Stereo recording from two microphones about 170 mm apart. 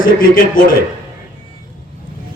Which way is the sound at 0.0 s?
55° left (ahead or behind).